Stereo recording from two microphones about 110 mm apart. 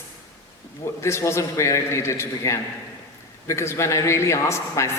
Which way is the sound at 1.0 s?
25° left (ahead or behind).